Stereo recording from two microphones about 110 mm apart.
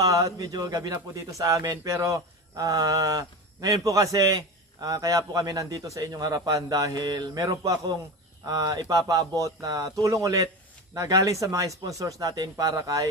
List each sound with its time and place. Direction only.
0.0 s a man's voice: 35° right (ahead or behind)